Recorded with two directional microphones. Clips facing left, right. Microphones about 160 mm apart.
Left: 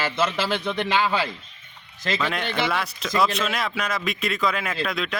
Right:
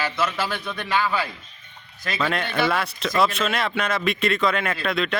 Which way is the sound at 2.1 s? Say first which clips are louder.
Right 3 dB; 5° right (ahead or behind).